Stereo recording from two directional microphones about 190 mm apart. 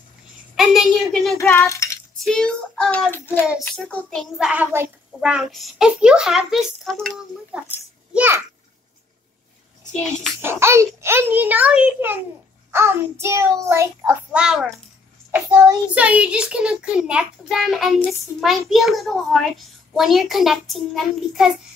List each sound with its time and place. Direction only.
0.6 s a woman's voice: centre (ahead or behind)
1.8 s child singing: 15° left (ahead or behind)
2.2 s child singing: 5° left (ahead or behind)
8.1 s a child's voice: 10° right (ahead or behind)
10.4 s a child's voice: 15° right (ahead or behind)
15.9 s child singing: 5° right (ahead or behind)